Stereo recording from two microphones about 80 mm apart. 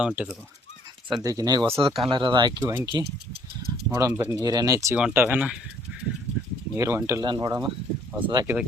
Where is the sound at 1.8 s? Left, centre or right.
Right.